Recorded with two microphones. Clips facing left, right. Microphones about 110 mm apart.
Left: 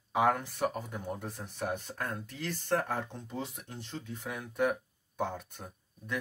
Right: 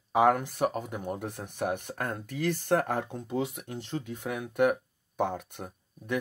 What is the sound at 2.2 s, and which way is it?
Speech, 60° right (ahead or behind).